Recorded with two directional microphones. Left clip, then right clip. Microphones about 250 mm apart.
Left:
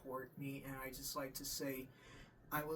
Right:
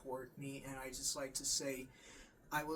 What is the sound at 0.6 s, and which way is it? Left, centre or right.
Speech, centre.